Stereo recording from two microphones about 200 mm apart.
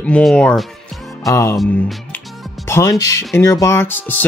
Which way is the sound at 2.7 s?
15° left (ahead or behind).